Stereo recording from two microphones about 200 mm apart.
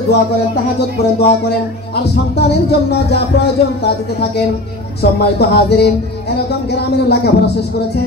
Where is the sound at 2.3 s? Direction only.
55° left (ahead or behind).